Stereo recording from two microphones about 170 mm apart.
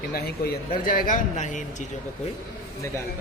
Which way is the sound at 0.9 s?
50° left (ahead or behind).